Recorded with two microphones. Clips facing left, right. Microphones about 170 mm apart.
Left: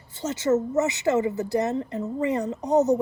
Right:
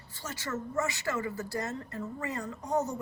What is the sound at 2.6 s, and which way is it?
Speech, 75° left (ahead or behind).